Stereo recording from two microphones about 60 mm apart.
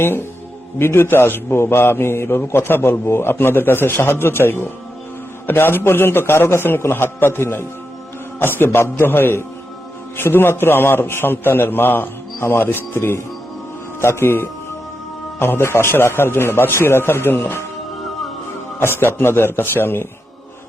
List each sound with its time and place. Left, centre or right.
0.0 s a man's voice: left
18.8 s a man's voice: left